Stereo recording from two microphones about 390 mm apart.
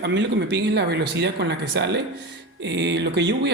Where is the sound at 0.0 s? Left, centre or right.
Right.